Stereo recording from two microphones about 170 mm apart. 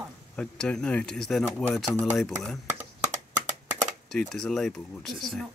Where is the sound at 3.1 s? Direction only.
45° right (ahead or behind).